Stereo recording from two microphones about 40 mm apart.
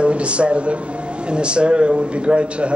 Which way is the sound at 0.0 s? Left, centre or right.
Right.